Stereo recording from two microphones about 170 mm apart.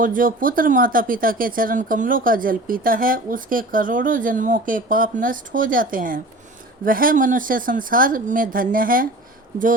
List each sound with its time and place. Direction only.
0.0 s a woman's voice: 55° right (ahead or behind)